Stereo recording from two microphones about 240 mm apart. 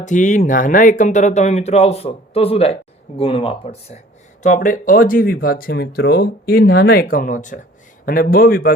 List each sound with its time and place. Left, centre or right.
0.0 s speech: left